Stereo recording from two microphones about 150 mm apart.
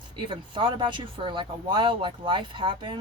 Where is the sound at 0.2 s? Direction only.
35° right (ahead or behind).